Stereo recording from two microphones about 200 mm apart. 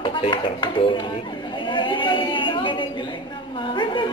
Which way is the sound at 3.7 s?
25° left (ahead or behind).